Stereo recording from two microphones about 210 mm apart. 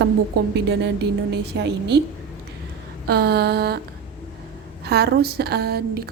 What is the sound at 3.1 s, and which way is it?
Speech, 50° right (ahead or behind).